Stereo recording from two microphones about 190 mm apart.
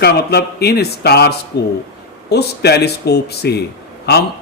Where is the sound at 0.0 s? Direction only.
55° left (ahead or behind).